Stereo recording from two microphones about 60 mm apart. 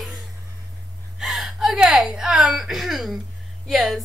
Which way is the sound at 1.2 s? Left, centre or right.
Centre.